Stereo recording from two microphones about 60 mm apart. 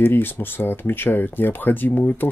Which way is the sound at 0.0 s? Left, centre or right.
Left.